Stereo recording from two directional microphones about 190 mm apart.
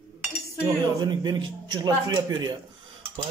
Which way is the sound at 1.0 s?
20° right (ahead or behind).